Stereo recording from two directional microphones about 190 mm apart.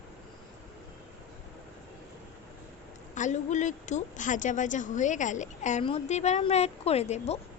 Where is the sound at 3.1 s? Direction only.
40° left (ahead or behind).